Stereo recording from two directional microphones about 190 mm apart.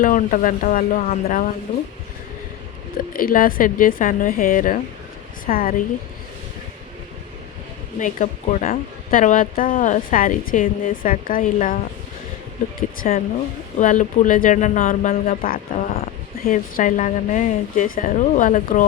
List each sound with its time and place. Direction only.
0.0 s speech: 45° left (ahead or behind)
3.0 s speech: 45° left (ahead or behind)
7.9 s speech: 40° left (ahead or behind)
13.0 s speech: 50° left (ahead or behind)